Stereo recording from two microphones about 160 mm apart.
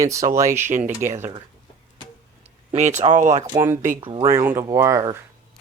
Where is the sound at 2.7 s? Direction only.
45° right (ahead or behind).